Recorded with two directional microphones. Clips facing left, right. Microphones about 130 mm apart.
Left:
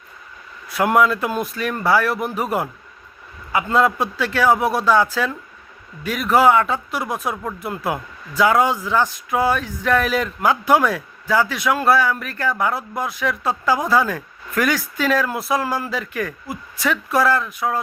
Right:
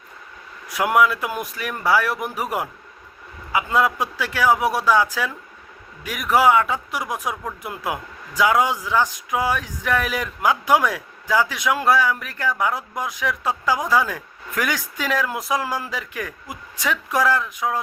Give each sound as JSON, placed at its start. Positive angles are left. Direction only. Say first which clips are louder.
{"t": 0.7, "sound": "speech", "louder": "left 2 dB", "side_deg": -15}